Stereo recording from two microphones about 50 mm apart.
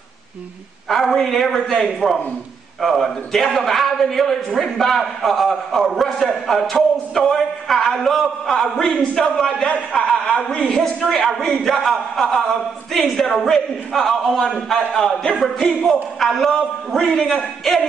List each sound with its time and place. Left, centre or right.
0.8 s a man's voice: centre
9.6 s a man's voice: left
9.9 s a woman's voice: centre
10.8 s a man's voice: centre